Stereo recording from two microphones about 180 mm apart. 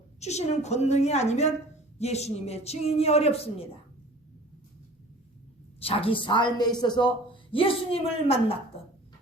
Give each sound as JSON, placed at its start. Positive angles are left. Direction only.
{"t": 0.2, "sound": "speech", "side_deg": 40}
{"t": 5.8, "sound": "a woman's voice", "side_deg": 30}